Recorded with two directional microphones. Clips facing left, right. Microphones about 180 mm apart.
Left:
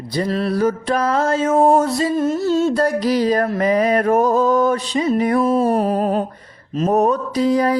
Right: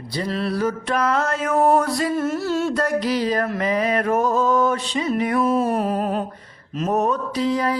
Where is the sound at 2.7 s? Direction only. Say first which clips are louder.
Left 4 dB; 35° left (ahead or behind).